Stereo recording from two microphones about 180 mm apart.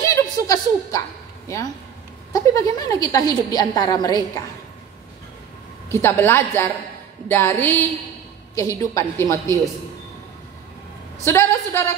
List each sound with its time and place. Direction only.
0.0 s a sound: 20° left (ahead or behind)
2.3 s a woman's voice: 20° left (ahead or behind)
5.9 s a woman's voice: 15° left (ahead or behind)
11.2 s a woman's voice: 15° left (ahead or behind)